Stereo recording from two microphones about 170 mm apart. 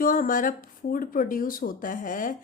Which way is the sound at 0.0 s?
55° left (ahead or behind).